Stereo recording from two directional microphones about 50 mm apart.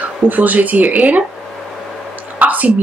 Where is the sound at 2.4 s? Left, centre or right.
Right.